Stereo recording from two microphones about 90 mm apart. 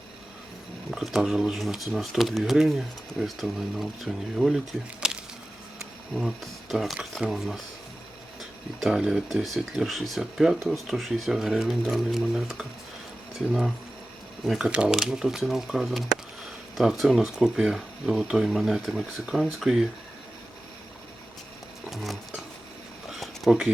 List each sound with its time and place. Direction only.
0.9 s speech: centre (ahead or behind)
6.1 s speech: centre (ahead or behind)
21.8 s music: centre (ahead or behind)
23.2 s a sound: centre (ahead or behind)